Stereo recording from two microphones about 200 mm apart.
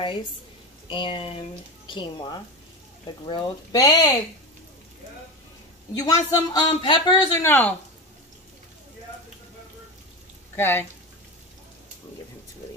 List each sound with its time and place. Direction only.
0.8 s speech: 25° left (ahead or behind)
5.9 s speech: 20° left (ahead or behind)
10.5 s speech: 10° left (ahead or behind)